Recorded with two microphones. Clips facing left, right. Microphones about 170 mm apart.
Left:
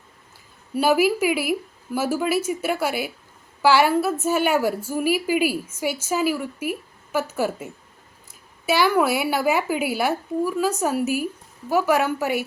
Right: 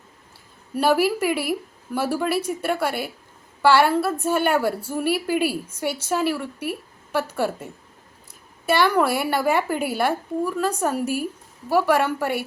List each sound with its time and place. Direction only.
0.8 s a woman's voice: 5° left (ahead or behind)